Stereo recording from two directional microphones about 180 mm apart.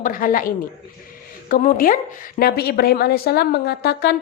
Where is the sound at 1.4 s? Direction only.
50° left (ahead or behind).